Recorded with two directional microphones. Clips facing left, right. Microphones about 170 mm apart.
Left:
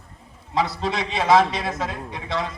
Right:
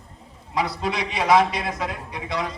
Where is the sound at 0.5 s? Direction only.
25° left (ahead or behind).